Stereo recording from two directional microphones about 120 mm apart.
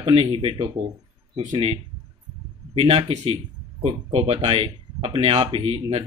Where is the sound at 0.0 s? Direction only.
50° right (ahead or behind).